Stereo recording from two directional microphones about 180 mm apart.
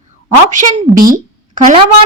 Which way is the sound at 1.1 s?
45° right (ahead or behind).